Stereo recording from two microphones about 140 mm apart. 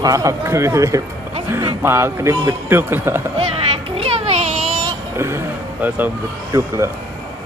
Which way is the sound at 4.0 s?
45° right (ahead or behind).